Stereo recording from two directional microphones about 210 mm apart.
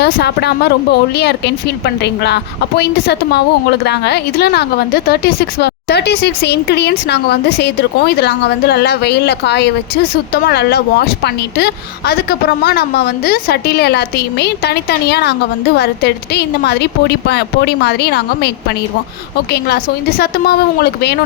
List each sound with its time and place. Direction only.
0.0 s a woman's voice: 50° left (ahead or behind)